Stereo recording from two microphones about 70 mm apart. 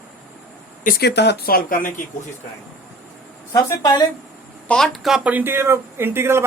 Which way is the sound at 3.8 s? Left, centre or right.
Left.